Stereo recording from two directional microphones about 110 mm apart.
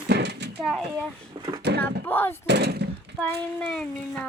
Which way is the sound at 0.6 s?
Centre (ahead or behind).